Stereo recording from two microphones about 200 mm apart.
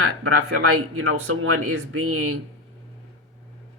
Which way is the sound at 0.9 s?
90° right.